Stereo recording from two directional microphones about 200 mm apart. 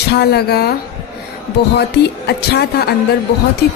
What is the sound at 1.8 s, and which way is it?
Speech, 55° left (ahead or behind).